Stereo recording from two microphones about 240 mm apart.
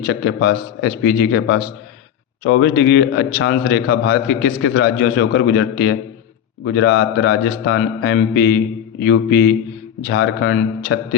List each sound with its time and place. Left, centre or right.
0.0 s a man's voice: left